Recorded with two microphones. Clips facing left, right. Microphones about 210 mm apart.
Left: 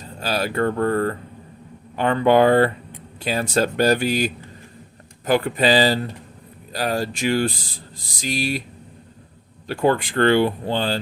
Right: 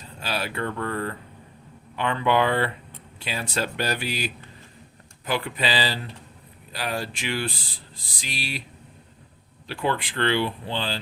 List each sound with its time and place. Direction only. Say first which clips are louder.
0.2 s speech: left 7 dB; 40° left (ahead or behind)
9.6 s speech: left 7 dB; 45° left (ahead or behind)